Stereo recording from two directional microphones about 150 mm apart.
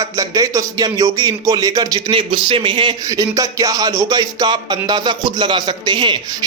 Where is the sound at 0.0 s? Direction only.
20° right (ahead or behind).